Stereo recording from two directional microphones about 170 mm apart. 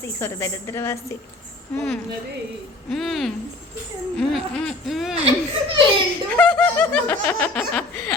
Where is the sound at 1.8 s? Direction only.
5° left (ahead or behind).